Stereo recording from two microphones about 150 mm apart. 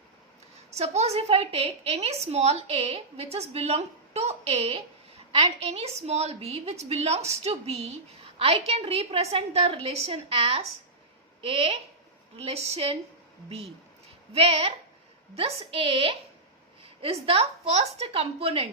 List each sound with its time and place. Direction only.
0.7 s a woman's voice: 45° right (ahead or behind)
14.3 s a woman's voice: 40° right (ahead or behind)